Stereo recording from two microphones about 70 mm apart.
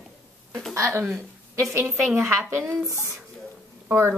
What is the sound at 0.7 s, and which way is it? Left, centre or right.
Speech, right.